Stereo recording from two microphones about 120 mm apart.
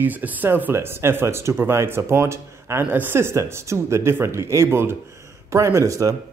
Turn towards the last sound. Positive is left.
turn(degrees=-25)  # may be behind; listen again after turning